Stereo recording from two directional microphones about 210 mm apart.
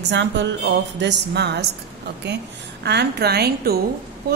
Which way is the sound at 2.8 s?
50° right (ahead or behind).